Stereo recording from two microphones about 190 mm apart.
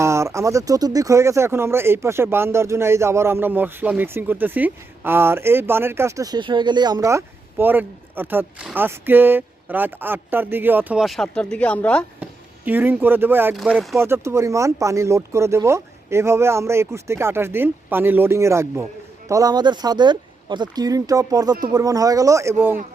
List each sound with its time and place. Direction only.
0.0 s speech: 15° right (ahead or behind); by 12.0 s 5° left (ahead or behind)
12.2 s speech: 10° right (ahead or behind)
14.0 s speech: 15° right (ahead or behind)